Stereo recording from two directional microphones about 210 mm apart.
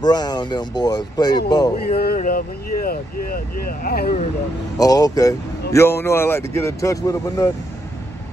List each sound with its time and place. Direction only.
0.0 s speech: 20° left (ahead or behind)
1.9 s speech: 45° left (ahead or behind)
4.7 s speech: 15° left (ahead or behind)